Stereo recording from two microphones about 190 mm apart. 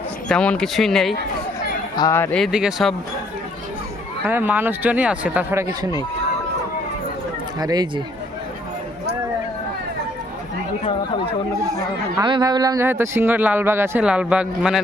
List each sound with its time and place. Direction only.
0.3 s speech: 5° left (ahead or behind)
2.0 s speech: 15° left (ahead or behind)
2.4 s speech: 5° right (ahead or behind)
4.3 s speech: 10° right (ahead or behind)
7.6 s speech: 20° right (ahead or behind)
11.6 s speech: 20° right (ahead or behind)